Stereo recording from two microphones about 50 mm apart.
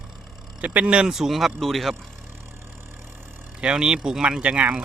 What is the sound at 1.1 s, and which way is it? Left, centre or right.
Speech, centre.